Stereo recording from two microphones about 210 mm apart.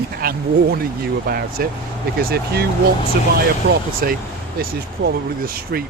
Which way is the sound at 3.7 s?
45° right (ahead or behind).